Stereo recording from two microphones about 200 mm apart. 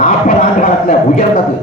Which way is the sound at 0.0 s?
45° left (ahead or behind).